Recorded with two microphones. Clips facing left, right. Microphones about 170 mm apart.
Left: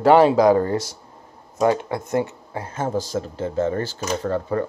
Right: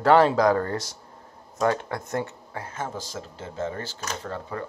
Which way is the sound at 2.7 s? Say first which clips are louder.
Left 11 dB; 40° left (ahead or behind).